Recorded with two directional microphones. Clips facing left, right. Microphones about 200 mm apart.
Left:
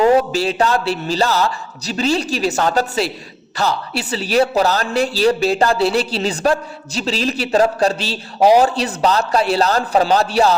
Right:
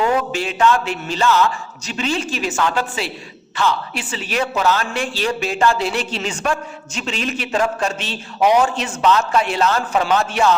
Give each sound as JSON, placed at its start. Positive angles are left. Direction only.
{"t": 0.0, "sound": "speech", "side_deg": 35}